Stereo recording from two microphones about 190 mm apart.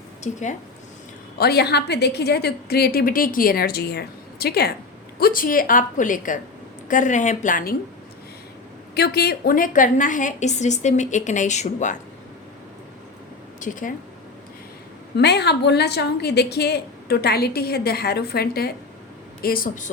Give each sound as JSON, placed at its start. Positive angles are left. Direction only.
{"t": 0.2, "sound": "a woman's voice", "side_deg": 40}
{"t": 1.4, "sound": "a woman's voice", "side_deg": 60}
{"t": 9.0, "sound": "a woman's voice", "side_deg": 55}
{"t": 13.6, "sound": "speech", "side_deg": 45}
{"t": 15.1, "sound": "a woman's voice", "side_deg": 60}